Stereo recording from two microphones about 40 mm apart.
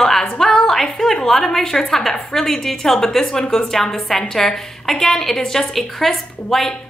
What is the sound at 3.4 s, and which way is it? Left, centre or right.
Speech, left.